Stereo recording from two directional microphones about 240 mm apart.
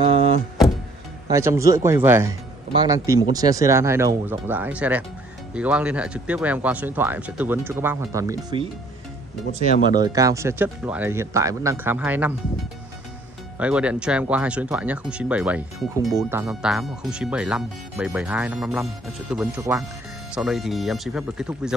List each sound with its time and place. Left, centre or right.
1.3 s speech: centre
9.8 s speech: centre
13.6 s speech: centre